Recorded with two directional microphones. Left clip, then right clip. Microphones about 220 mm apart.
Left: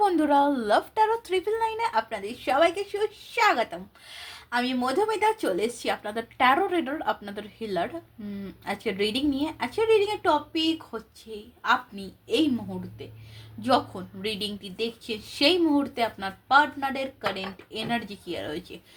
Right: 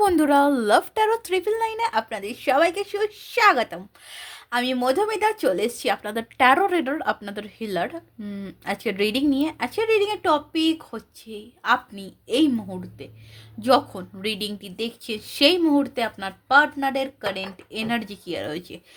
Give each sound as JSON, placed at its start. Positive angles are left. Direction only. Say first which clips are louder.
{"t": 0.0, "sound": "a woman's voice", "louder": "right 3 dB", "side_deg": -45}
{"t": 13.6, "sound": "a woman's voice", "louder": "right 5 dB", "side_deg": -50}